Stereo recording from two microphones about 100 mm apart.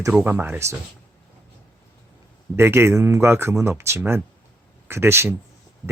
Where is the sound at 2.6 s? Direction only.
25° right (ahead or behind).